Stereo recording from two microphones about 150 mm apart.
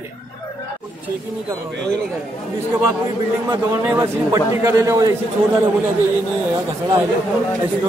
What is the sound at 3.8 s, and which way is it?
A man's voice, 20° right (ahead or behind).